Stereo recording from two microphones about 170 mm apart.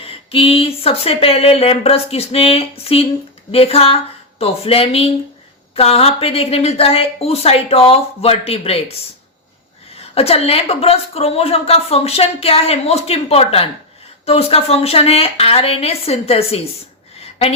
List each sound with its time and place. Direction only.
0.0 s a woman's voice: 35° left (ahead or behind)